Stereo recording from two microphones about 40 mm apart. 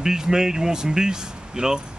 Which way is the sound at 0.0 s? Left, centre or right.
Centre.